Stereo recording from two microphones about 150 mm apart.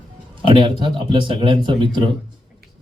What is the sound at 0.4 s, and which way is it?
Speech, 35° right (ahead or behind).